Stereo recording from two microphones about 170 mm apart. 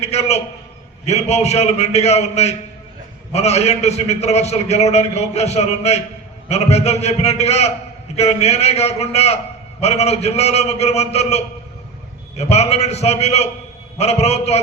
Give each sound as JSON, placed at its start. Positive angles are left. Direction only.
{"t": 0.0, "sound": "a man's voice", "side_deg": 40}